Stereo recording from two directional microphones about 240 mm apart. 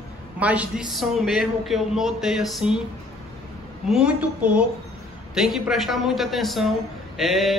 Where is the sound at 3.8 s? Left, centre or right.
Centre.